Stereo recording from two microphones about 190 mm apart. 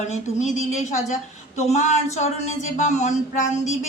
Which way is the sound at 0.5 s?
40° left (ahead or behind).